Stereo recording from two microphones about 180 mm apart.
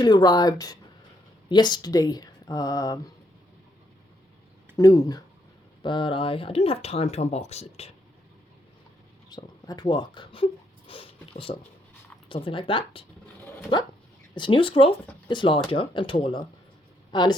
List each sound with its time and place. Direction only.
0.0 s speech: 25° left (ahead or behind)
4.8 s speech: 20° left (ahead or behind); by 7.9 s 35° left (ahead or behind)
9.3 s speech: 20° left (ahead or behind)
14.3 s speech: 30° left (ahead or behind)